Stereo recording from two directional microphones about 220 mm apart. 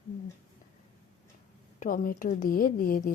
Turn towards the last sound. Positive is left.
turn(degrees=40)  # may be behind; listen again after turning